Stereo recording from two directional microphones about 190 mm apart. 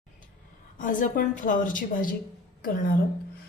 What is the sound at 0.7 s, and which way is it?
A woman's voice, 45° left (ahead or behind).